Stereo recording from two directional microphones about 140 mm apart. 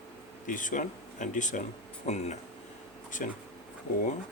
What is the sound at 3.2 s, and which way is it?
Speech, 80° left.